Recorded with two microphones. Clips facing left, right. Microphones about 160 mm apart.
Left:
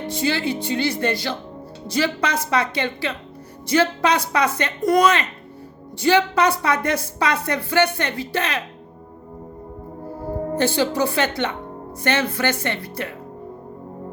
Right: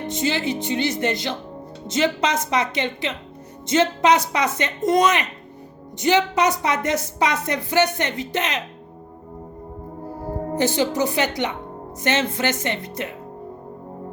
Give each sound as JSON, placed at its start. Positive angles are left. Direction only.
{"t": 0.1, "sound": "a woman's voice", "side_deg": -20}
{"t": 10.5, "sound": "a woman's voice", "side_deg": -20}